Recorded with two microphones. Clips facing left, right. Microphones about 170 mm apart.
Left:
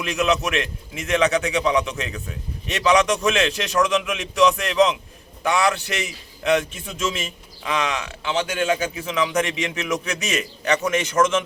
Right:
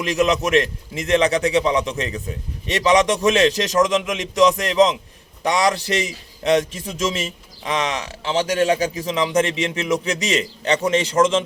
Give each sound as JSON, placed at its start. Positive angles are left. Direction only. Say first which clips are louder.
{"t": 0.2, "sound": "a man's voice", "louder": "right 4 dB", "side_deg": -35}